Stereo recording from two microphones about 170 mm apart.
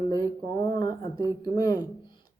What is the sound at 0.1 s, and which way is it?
Speech, 25° left (ahead or behind).